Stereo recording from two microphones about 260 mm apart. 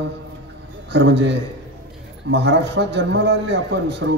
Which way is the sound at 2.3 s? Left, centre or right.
Right.